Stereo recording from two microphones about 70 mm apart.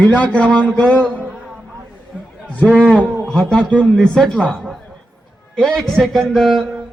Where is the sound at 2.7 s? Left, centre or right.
Centre.